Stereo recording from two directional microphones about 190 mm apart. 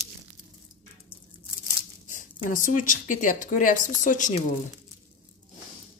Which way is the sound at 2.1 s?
45° left (ahead or behind).